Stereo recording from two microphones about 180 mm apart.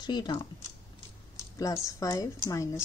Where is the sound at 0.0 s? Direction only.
25° left (ahead or behind).